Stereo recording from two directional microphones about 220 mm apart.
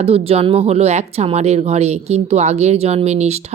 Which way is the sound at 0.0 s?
25° right (ahead or behind).